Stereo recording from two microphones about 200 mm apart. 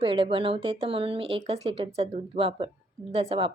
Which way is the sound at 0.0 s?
25° right (ahead or behind).